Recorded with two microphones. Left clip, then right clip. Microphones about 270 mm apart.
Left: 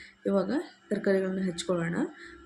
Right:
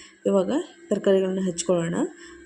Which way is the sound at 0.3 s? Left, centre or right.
Centre.